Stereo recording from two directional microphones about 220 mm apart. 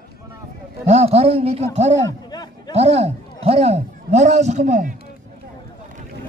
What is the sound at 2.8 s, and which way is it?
A man's voice, 30° right (ahead or behind).